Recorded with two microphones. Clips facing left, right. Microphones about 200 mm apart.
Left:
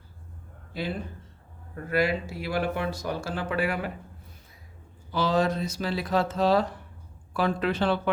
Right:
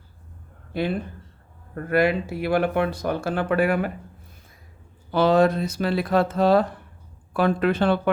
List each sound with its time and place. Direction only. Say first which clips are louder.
0.7 s speech: right 7 dB; 60° right (ahead or behind)
5.1 s speech: right 7 dB; 60° right (ahead or behind)